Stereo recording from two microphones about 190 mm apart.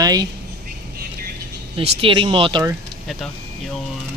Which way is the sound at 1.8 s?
30° right (ahead or behind).